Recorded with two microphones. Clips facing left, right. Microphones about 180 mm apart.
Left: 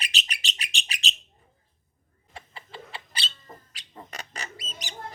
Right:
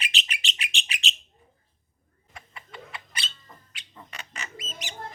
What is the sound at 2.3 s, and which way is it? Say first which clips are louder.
Cat: left 2 dB; 30° left (ahead or behind).